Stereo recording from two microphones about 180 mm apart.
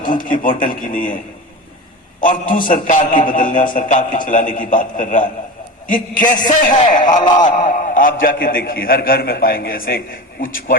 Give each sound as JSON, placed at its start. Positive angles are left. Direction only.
{"t": 0.0, "sound": "a man's voice", "side_deg": 50}
{"t": 2.2, "sound": "a man's voice", "side_deg": 50}
{"t": 6.5, "sound": "a man's voice", "side_deg": 45}
{"t": 7.2, "sound": "a sound", "side_deg": 25}
{"t": 7.4, "sound": "a man's voice", "side_deg": 45}